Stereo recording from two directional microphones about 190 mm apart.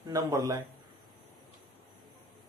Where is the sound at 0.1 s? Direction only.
20° right (ahead or behind).